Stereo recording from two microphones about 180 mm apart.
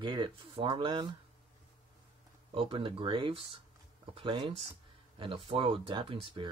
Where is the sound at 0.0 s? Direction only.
25° right (ahead or behind).